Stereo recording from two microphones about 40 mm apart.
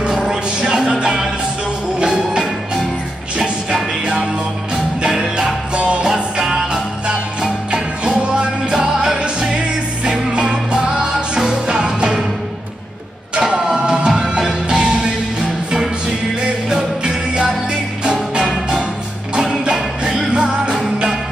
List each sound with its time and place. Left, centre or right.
0.3 s a sound: right
0.9 s music: right
4.0 s music: centre
5.8 s music: right
6.0 s music: centre
13.7 s music: centre
16.6 s music: centre